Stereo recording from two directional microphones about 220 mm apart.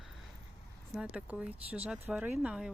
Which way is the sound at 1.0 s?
5° right (ahead or behind).